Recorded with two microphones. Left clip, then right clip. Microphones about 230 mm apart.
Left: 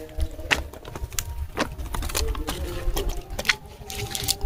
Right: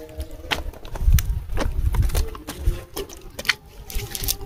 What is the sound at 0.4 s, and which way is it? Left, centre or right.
Clip-clop, left.